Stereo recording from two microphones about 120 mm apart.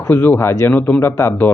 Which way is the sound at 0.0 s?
20° left (ahead or behind).